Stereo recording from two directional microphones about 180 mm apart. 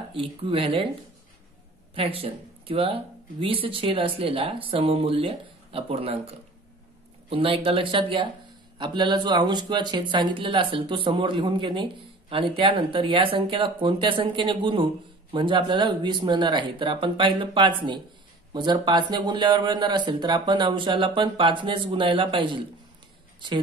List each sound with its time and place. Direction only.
0.1 s speech: 30° right (ahead or behind)
2.0 s speech: 30° right (ahead or behind)